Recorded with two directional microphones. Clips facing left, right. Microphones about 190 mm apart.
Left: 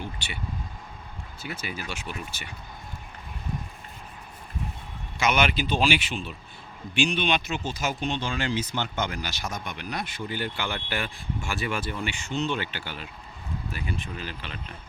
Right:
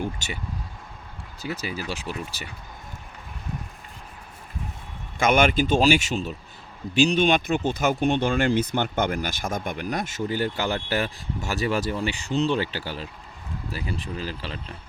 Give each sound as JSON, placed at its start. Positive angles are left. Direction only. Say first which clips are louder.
{"t": 0.0, "sound": "speech", "louder": "right 6 dB", "side_deg": -45}
{"t": 1.4, "sound": "speech", "louder": "right 5 dB", "side_deg": -35}
{"t": 5.2, "sound": "speech", "louder": "right 5 dB", "side_deg": -50}